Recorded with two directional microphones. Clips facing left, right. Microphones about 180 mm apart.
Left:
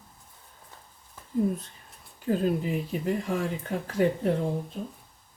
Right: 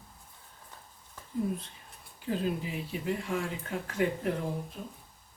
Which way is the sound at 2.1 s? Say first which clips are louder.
Left 6 dB; 45° left (ahead or behind).